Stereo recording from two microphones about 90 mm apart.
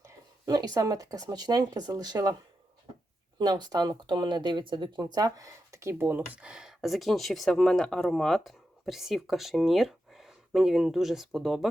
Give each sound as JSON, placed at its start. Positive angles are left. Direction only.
{"t": 0.4, "sound": "speech", "side_deg": -45}
{"t": 3.3, "sound": "speech", "side_deg": -50}